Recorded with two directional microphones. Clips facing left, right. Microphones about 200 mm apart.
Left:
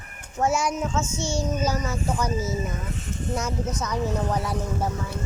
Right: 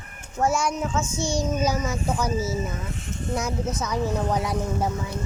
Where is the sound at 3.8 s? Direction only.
10° right (ahead or behind).